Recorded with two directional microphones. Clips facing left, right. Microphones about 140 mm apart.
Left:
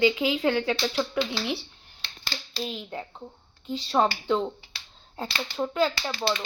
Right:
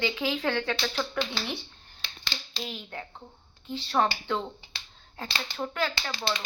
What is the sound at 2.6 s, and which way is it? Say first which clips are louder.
Speech: left 5 dB; 20° left (ahead or behind).